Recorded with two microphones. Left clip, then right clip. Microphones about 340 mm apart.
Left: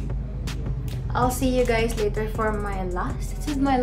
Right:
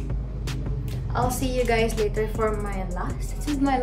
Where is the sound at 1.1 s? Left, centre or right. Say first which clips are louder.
Left 3 dB; centre.